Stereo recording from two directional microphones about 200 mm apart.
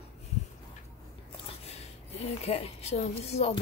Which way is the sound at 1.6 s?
35° left (ahead or behind).